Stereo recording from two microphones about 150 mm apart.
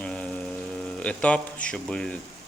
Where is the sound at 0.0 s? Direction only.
5° left (ahead or behind).